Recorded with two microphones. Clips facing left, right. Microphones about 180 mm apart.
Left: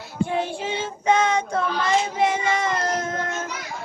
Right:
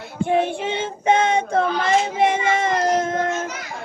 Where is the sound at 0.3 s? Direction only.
60° right (ahead or behind).